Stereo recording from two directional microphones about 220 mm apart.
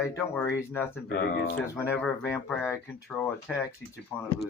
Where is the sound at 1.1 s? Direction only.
45° left (ahead or behind).